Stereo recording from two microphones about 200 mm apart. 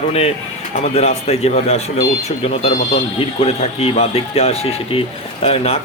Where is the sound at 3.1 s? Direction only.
30° left (ahead or behind).